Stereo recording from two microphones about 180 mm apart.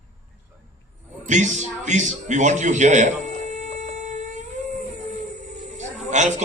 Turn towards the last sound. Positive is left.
turn(degrees=-40)  # may be behind; listen again after turning